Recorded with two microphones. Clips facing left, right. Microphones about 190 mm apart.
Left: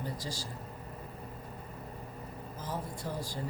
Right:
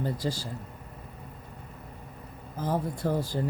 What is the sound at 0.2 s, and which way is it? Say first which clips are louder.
Speech: right 10 dB; 75° right (ahead or behind).